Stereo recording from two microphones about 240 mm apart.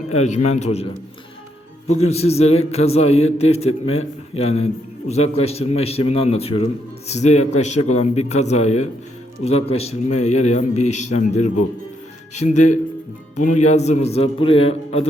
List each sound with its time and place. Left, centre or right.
0.1 s a man's voice: left
1.9 s a man's voice: left